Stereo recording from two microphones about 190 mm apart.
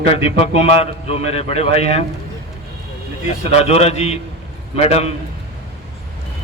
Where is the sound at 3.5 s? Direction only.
35° left (ahead or behind).